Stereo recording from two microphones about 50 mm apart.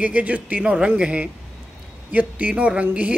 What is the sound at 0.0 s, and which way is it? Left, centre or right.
Speech, right.